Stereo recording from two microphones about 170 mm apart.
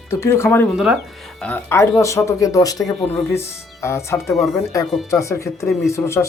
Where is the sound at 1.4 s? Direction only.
10° left (ahead or behind).